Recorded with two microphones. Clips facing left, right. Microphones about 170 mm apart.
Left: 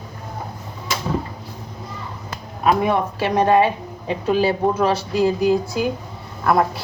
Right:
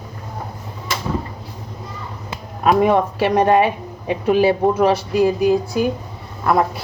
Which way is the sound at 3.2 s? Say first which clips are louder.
Even; 20° right (ahead or behind).